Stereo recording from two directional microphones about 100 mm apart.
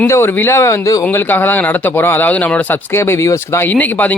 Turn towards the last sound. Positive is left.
turn(degrees=15)  # may be behind; listen again after turning